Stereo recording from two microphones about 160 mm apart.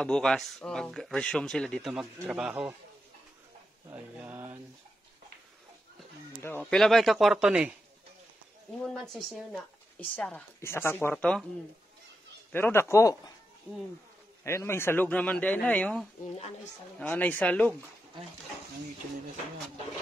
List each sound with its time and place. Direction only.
0.0 s speech: 5° left (ahead or behind)
3.9 s speech: 10° right (ahead or behind)
6.4 s speech: 10° left (ahead or behind)
8.8 s a woman's voice: centre (ahead or behind)
12.5 s a woman's voice: 15° left (ahead or behind)
14.4 s a woman's voice: 15° left (ahead or behind)